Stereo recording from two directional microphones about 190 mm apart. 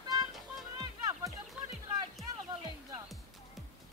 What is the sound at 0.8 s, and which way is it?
Music, 15° right (ahead or behind).